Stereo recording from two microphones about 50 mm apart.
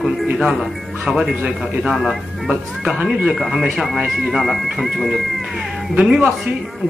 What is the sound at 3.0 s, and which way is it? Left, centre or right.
Speech, right.